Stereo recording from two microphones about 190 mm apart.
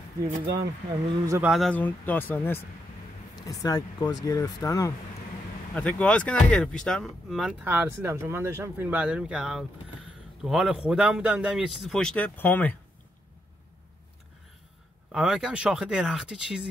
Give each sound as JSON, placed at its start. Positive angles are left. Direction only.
{"t": 1.2, "sound": "speech", "side_deg": -15}
{"t": 1.5, "sound": "speech", "side_deg": 5}
{"t": 5.8, "sound": "speech", "side_deg": 5}
{"t": 15.1, "sound": "speech", "side_deg": -5}